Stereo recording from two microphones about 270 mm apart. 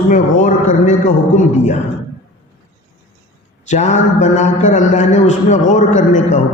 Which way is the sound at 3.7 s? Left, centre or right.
Left.